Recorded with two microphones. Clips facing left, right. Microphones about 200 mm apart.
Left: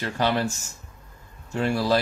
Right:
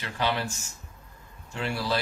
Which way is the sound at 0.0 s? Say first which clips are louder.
Left 5 dB; 45° left (ahead or behind).